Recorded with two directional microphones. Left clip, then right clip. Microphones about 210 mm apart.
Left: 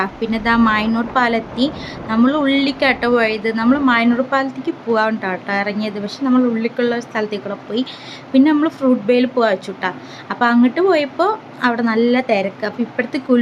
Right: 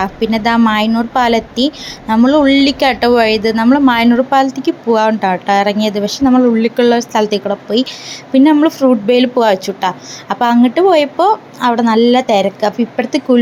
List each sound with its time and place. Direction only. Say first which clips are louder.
0.0 s a woman's voice: right 5 dB; 20° right (ahead or behind)